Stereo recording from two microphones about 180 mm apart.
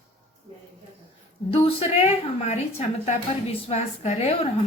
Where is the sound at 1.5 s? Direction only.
30° left (ahead or behind).